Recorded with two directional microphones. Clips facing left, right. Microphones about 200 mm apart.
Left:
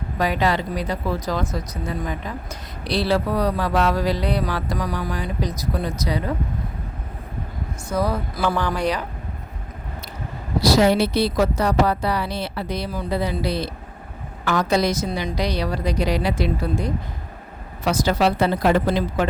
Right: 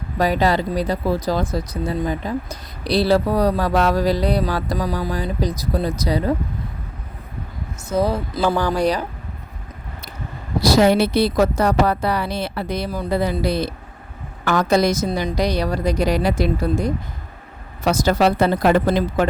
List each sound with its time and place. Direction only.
0.2 s speech: 35° right (ahead or behind)
7.9 s speech: 25° right (ahead or behind)
10.6 s speech: 50° right (ahead or behind)